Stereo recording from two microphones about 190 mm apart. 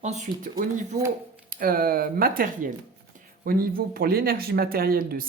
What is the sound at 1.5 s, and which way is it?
Speech, 50° right (ahead or behind).